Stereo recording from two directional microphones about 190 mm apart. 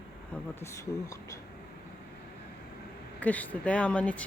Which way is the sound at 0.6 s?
15° left (ahead or behind).